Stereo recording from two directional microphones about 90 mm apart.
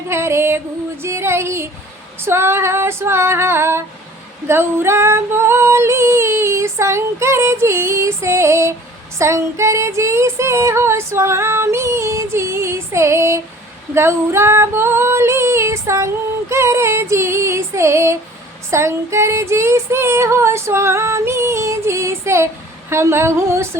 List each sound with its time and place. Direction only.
0.1 s music: 30° right (ahead or behind)
1.0 s female singing: 30° right (ahead or behind)